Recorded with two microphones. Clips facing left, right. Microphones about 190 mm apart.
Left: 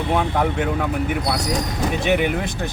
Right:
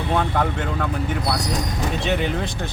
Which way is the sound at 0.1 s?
15° left (ahead or behind).